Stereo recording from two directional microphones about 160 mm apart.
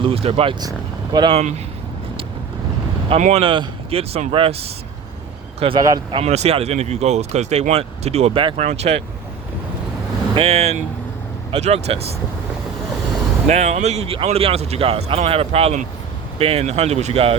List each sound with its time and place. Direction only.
0.0 s speech: 35° right (ahead or behind)
3.1 s speech: 45° right (ahead or behind)
3.4 s speech: 35° right (ahead or behind)
5.5 s speech: 35° right (ahead or behind)
5.8 s speech: 25° right (ahead or behind)
6.1 s speech: 40° right (ahead or behind)
10.3 s speech: 40° right (ahead or behind)
13.5 s speech: 45° right (ahead or behind)